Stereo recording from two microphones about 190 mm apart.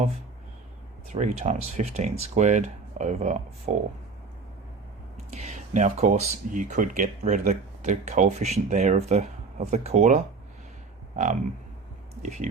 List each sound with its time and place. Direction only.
1.0 s speech: 40° right (ahead or behind)
5.3 s speech: 35° right (ahead or behind)
12.2 s speech: 40° right (ahead or behind)